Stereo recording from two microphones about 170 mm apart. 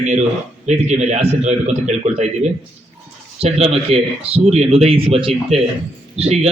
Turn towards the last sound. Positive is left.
turn(degrees=-40)  # may be behind; listen again after turning